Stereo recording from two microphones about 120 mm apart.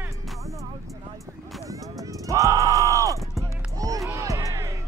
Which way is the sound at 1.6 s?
30° right (ahead or behind).